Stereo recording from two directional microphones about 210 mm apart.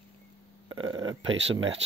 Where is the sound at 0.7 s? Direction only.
70° right (ahead or behind).